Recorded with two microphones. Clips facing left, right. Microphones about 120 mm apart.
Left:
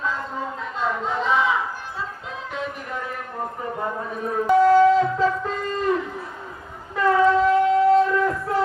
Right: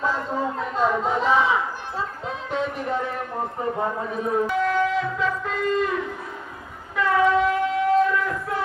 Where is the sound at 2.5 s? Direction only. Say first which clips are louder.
Right 6 dB; 30° right (ahead or behind).